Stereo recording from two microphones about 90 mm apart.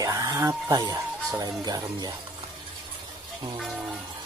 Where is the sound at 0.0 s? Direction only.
40° right (ahead or behind).